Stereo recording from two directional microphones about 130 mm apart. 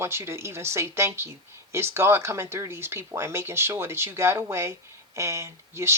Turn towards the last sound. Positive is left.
turn(degrees=-20)  # may be behind; listen again after turning